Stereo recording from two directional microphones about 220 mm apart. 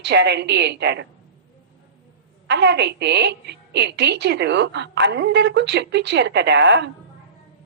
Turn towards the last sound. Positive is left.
turn(degrees=-50)  # may be behind; listen again after turning